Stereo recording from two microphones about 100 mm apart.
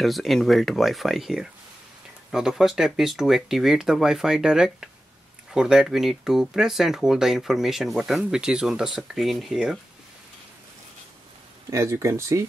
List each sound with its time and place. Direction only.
0.0 s speech: centre (ahead or behind)
11.7 s speech: 30° right (ahead or behind)